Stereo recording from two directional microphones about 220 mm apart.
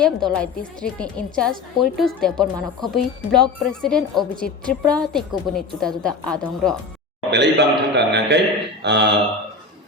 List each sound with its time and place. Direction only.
0.3 s a woman's voice: 5° left (ahead or behind)
7.3 s a man's voice: 50° right (ahead or behind)